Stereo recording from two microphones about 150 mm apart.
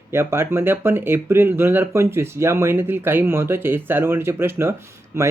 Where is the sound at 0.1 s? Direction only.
15° right (ahead or behind).